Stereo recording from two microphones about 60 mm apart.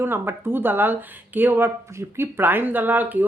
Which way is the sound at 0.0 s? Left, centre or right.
Right.